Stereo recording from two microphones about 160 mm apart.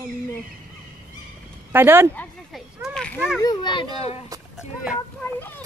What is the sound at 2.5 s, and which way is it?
Children playing, centre (ahead or behind).